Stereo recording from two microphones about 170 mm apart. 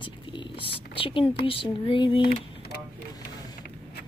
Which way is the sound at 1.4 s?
30° left (ahead or behind).